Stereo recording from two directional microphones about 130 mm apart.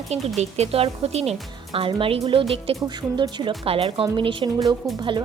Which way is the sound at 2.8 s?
30° right (ahead or behind).